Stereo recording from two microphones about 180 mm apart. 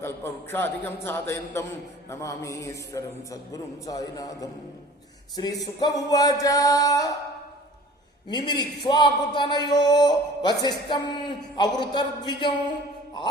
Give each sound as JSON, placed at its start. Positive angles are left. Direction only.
{"t": 0.0, "sound": "a man's voice", "side_deg": 15}
{"t": 8.3, "sound": "a man's voice", "side_deg": 25}